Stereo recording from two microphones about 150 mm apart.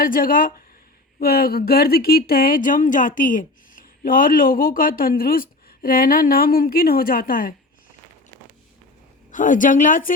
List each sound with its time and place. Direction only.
0.0 s speech: 70° left (ahead or behind)
1.2 s speech: 90° left; by 7.5 s 70° left (ahead or behind)
9.3 s a woman's voice: 60° left (ahead or behind)